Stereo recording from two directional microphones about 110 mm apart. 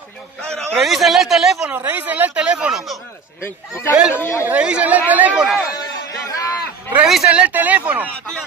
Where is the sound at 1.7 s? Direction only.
15° right (ahead or behind).